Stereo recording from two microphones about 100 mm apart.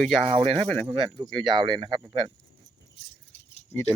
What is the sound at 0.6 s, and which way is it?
Speech, 10° left (ahead or behind).